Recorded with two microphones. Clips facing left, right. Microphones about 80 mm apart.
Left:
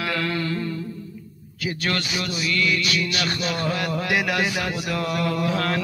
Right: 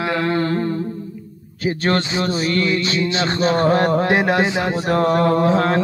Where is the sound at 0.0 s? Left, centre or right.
Right.